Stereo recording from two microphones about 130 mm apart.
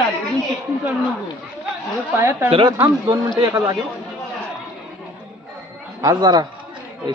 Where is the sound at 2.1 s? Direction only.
20° right (ahead or behind).